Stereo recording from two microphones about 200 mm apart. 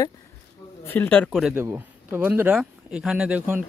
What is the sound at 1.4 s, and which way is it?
Speech, 10° right (ahead or behind).